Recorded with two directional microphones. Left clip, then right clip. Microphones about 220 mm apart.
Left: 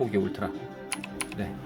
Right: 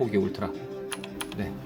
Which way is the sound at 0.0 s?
5° right (ahead or behind).